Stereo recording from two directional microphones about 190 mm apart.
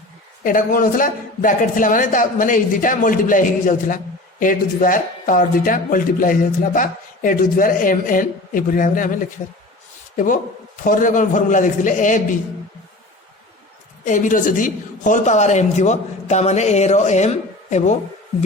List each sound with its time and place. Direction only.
0.4 s speech: 45° left (ahead or behind)
10.2 s speech: 45° left (ahead or behind)
14.0 s a woman's voice: 45° left (ahead or behind)